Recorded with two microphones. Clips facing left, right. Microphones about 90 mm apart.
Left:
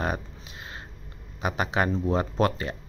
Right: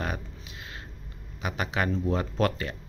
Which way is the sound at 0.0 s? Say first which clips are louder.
Left 4 dB; 30° left (ahead or behind).